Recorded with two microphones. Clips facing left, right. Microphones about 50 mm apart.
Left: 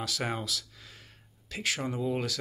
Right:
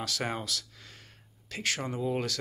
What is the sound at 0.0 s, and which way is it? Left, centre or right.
Speech, centre.